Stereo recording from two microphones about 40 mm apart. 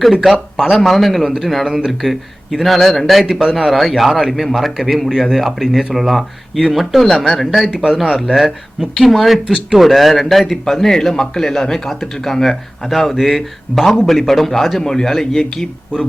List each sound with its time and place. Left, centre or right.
0.1 s speech: centre
0.8 s speech: centre
7.7 s speech: centre
8.4 s speech: centre
14.8 s speech: centre